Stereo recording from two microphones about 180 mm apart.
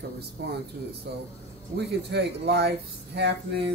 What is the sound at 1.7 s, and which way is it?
Speech, 65° right (ahead or behind).